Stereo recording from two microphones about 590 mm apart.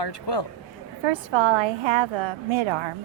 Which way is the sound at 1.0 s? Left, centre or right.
Right.